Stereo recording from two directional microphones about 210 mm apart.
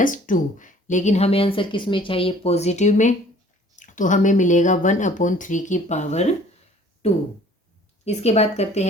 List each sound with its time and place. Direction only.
0.0 s speech: 40° left (ahead or behind)
8.0 s speech: 30° left (ahead or behind)